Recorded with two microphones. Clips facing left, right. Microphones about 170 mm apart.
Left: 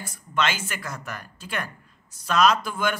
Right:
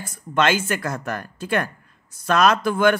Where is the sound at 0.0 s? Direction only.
50° right (ahead or behind).